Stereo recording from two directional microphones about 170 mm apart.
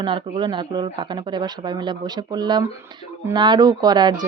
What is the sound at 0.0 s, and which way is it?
Speech, 30° right (ahead or behind).